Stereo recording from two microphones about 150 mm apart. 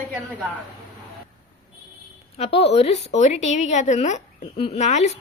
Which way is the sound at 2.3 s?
45° left (ahead or behind).